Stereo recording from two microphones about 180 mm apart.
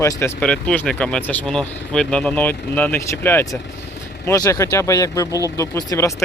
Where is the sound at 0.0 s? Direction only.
15° left (ahead or behind).